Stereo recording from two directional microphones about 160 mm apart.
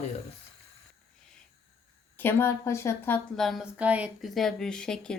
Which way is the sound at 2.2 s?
15° left (ahead or behind).